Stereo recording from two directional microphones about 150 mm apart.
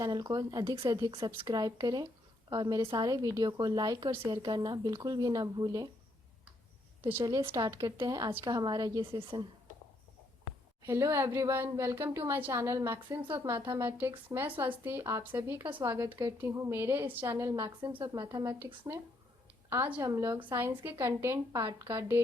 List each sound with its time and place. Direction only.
0.0 s a woman's voice: 30° right (ahead or behind)
7.1 s a woman's voice: 20° right (ahead or behind)
10.8 s a woman's voice: 20° right (ahead or behind)
19.7 s a woman's voice: 10° right (ahead or behind)
20.0 s a woman's voice: 20° right (ahead or behind)